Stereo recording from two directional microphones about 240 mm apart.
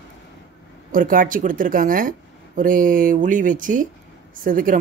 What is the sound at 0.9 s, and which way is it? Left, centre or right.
Speech, right.